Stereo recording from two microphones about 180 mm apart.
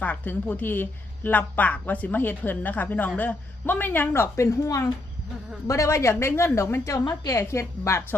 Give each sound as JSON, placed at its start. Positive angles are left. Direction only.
{"t": 0.0, "sound": "a woman's voice", "side_deg": 10}